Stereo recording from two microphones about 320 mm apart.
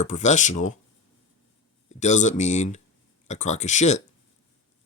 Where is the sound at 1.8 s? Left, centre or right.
Left.